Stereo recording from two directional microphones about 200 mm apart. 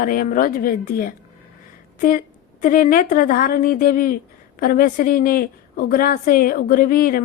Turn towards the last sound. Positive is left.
turn(degrees=45)  # may be behind; listen again after turning